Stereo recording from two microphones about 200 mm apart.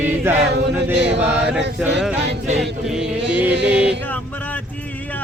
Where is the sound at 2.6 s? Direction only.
Centre (ahead or behind).